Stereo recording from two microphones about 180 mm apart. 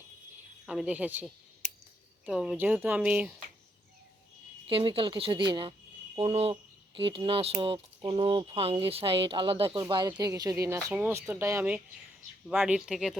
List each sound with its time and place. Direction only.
0.6 s speech: 5° right (ahead or behind)
4.7 s speech: 30° right (ahead or behind); by 13.1 s 5° right (ahead or behind)